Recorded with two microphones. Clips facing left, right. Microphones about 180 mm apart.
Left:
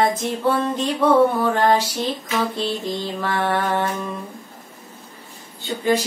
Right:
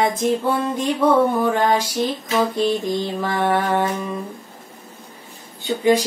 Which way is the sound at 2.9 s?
15° right (ahead or behind).